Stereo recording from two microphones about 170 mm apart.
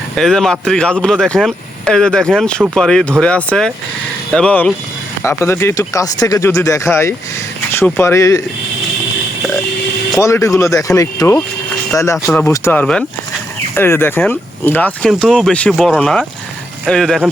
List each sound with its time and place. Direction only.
0.2 s speech: centre (ahead or behind); by 8.4 s 15° left (ahead or behind)
10.2 s speech: 15° left (ahead or behind)